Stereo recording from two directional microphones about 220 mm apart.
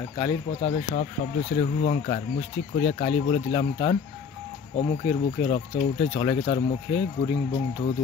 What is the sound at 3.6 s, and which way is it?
Speech, 25° left (ahead or behind).